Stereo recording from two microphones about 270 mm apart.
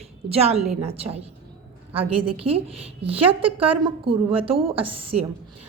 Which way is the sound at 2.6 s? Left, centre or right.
Right.